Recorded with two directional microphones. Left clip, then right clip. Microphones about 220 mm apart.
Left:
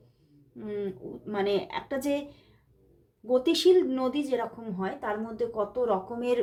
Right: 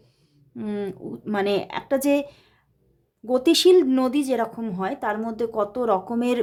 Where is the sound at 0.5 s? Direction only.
45° right (ahead or behind).